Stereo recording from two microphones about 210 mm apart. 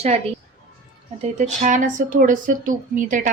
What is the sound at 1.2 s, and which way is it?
A woman's voice, 35° right (ahead or behind).